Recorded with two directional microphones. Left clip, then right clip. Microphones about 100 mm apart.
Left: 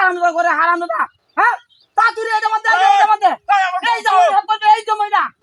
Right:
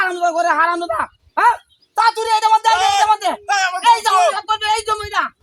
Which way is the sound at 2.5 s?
40° right (ahead or behind).